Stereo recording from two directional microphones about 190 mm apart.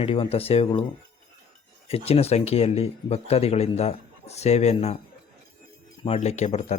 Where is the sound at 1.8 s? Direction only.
30° left (ahead or behind).